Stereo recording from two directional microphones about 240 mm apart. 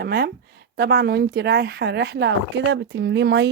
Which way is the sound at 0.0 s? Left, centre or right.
Right.